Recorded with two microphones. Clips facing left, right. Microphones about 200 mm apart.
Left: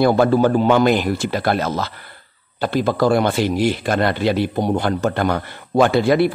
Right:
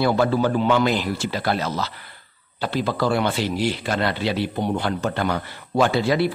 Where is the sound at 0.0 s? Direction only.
50° left (ahead or behind).